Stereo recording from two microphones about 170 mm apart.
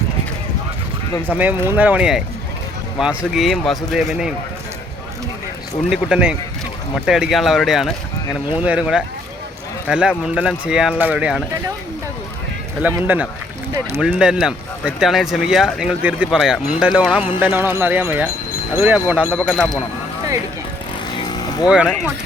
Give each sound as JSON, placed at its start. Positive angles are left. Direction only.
{"t": 1.3, "sound": "speech", "side_deg": -10}
{"t": 5.9, "sound": "speech", "side_deg": -5}
{"t": 12.8, "sound": "speech", "side_deg": -10}
{"t": 19.3, "sound": "speech", "side_deg": 5}
{"t": 21.2, "sound": "vehicle", "side_deg": 25}